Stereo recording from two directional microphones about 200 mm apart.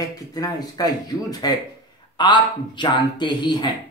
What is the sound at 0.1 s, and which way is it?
Speech, 20° left (ahead or behind).